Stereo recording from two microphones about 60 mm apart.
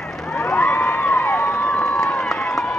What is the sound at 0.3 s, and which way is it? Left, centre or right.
Crowd, centre.